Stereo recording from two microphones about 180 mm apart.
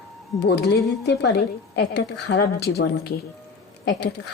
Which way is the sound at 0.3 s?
70° left (ahead or behind).